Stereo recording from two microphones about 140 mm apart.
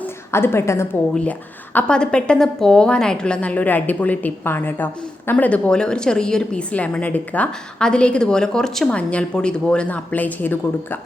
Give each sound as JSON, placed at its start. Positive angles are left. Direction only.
{"t": 0.3, "sound": "a woman's voice", "side_deg": 20}
{"t": 1.7, "sound": "a woman's voice", "side_deg": 5}